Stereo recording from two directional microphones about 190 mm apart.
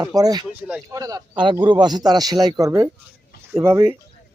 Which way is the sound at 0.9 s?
20° right (ahead or behind).